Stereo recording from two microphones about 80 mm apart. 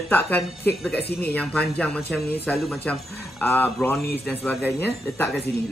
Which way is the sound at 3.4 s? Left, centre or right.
Left.